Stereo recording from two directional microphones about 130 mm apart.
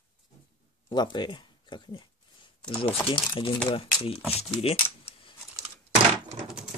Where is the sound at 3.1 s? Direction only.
40° left (ahead or behind).